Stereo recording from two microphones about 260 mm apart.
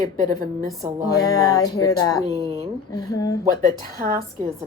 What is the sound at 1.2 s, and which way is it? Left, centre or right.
Speech, centre.